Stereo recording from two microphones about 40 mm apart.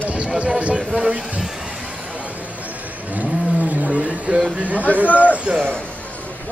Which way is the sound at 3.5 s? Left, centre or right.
Right.